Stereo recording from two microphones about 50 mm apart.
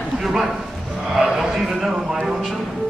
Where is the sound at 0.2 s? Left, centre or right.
Centre.